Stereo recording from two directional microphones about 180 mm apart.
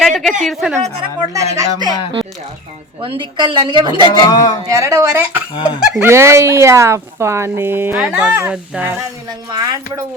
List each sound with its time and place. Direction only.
0.0 s a woman's voice: centre (ahead or behind)
1.3 s speech: 15° right (ahead or behind)
3.0 s a woman's voice: 30° right (ahead or behind)
4.2 s speech: 20° left (ahead or behind)
4.7 s speech: 15° right (ahead or behind)
5.5 s speech: 25° left (ahead or behind)
6.0 s speech: 15° right (ahead or behind)
9.5 s a woman's voice: 20° right (ahead or behind)